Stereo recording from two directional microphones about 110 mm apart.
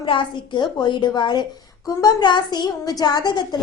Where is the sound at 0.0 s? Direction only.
45° left (ahead or behind).